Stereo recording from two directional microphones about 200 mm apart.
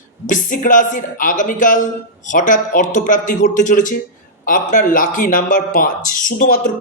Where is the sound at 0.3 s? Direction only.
40° left (ahead or behind).